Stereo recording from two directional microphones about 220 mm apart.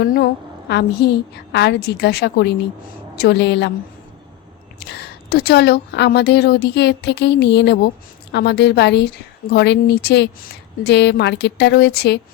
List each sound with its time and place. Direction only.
0.0 s a woman's voice: 45° left (ahead or behind)
4.9 s a woman's voice: 45° left (ahead or behind)